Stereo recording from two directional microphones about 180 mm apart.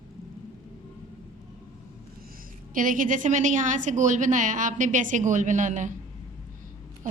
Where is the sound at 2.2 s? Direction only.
50° right (ahead or behind).